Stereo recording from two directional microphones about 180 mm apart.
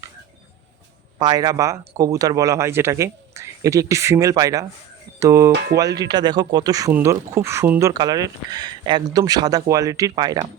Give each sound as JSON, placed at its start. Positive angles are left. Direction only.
{"t": 1.2, "sound": "speech", "side_deg": -20}